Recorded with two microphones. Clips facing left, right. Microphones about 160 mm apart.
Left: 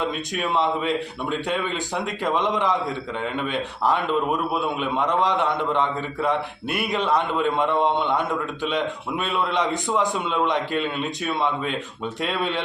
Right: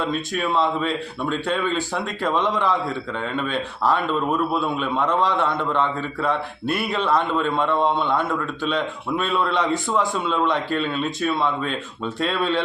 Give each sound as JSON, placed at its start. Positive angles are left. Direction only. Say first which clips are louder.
{"t": 0.1, "sound": "speech", "louder": "right 2 dB", "side_deg": 20}